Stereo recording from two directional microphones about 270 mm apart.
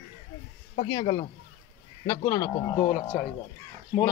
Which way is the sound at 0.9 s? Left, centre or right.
Centre.